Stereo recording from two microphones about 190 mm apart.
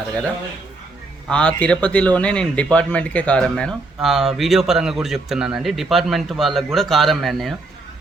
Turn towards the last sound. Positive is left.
turn(degrees=0)  # may be behind; listen again after turning